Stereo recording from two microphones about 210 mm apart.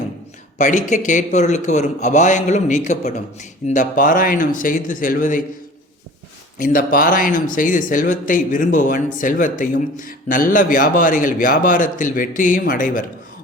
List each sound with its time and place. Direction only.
0.6 s a man's voice: 35° left (ahead or behind)
6.6 s a man's voice: 40° left (ahead or behind)